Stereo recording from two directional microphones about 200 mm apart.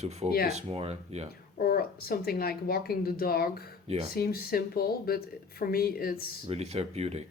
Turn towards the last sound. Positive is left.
turn(degrees=-30)  # may be behind; listen again after turning